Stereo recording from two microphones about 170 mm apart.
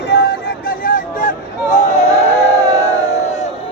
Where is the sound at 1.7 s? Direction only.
45° left (ahead or behind).